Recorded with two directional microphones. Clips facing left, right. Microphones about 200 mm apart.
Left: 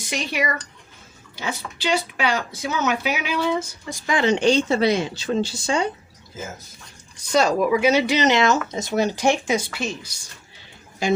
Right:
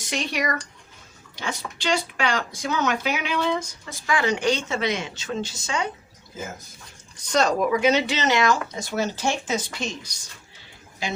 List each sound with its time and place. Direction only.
0.1 s speech: centre (ahead or behind)
4.0 s speech: 20° left (ahead or behind)
7.3 s speech: 10° left (ahead or behind)